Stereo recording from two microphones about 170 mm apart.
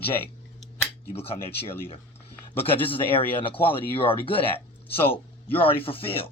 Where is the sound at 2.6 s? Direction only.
35° left (ahead or behind).